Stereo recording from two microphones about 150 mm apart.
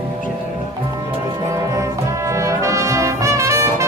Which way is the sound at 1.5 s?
20° right (ahead or behind).